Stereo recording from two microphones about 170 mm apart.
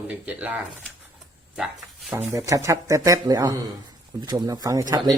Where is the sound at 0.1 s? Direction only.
10° right (ahead or behind).